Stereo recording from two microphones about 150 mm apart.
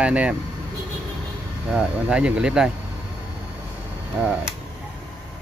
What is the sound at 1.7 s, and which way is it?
Speech, 5° right (ahead or behind).